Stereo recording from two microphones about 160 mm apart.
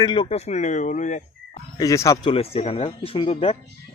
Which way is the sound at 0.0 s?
30° left (ahead or behind).